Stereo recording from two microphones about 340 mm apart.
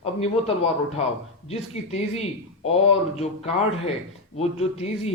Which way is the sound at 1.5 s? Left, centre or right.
Centre.